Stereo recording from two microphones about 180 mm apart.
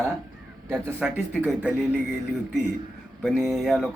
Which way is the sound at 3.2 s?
Centre (ahead or behind).